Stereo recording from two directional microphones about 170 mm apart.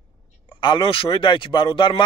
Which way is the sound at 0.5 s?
30° left (ahead or behind).